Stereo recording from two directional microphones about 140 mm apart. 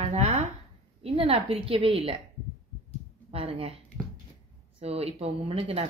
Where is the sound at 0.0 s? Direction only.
55° right (ahead or behind).